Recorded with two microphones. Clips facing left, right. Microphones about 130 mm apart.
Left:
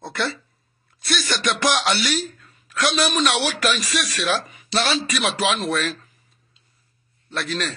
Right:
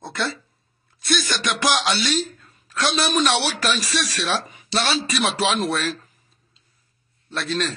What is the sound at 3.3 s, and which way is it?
Speech, 30° right (ahead or behind).